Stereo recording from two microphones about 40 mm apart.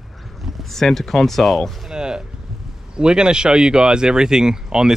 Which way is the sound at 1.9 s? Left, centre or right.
Right.